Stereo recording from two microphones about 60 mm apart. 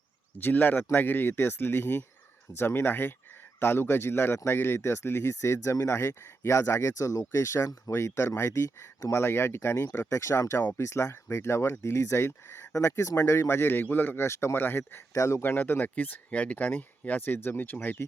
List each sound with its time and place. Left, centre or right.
0.3 s speech: left
7.3 s speech: left
12.7 s speech: left
14.3 s speech: left
15.1 s speech: left
15.4 s speech: left